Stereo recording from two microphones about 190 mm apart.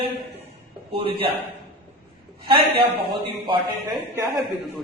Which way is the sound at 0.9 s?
30° right (ahead or behind).